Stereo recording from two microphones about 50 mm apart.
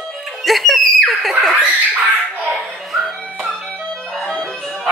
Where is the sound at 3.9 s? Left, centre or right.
Centre.